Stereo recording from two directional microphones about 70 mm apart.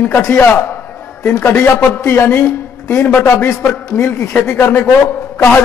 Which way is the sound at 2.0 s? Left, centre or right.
Left.